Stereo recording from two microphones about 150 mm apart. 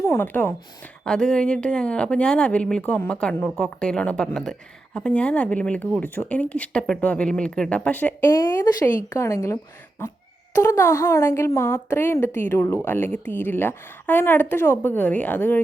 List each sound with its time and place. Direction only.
0.0 s a woman's voice: 15° left (ahead or behind)